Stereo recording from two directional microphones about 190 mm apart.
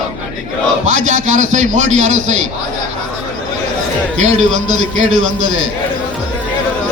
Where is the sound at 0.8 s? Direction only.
40° right (ahead or behind).